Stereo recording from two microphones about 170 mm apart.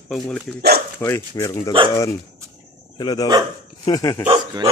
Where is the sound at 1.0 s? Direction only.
15° left (ahead or behind).